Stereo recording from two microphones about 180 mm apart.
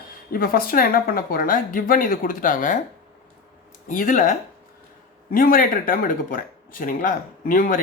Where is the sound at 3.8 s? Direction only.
50° left (ahead or behind).